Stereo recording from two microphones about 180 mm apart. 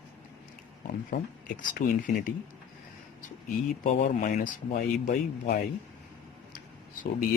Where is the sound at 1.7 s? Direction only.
50° left (ahead or behind).